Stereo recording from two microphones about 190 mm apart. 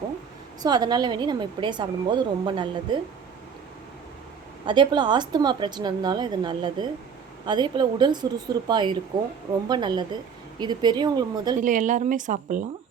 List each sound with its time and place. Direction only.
0.6 s a woman's voice: 20° right (ahead or behind)
4.6 s a woman's voice: 25° right (ahead or behind)
11.6 s speech: 40° right (ahead or behind)